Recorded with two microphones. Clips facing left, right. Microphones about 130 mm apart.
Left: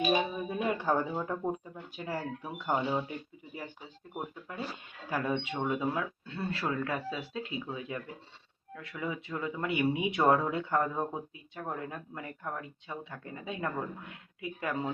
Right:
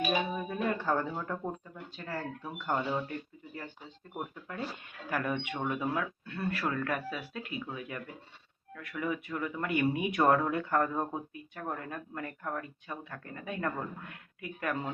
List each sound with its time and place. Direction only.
0.1 s speech: 15° left (ahead or behind)